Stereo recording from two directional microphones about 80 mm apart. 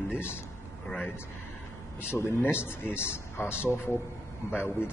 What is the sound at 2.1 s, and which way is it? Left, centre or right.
A man's voice, left.